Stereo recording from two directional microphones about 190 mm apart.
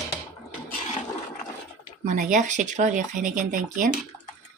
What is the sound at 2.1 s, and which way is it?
Speech, 40° right (ahead or behind).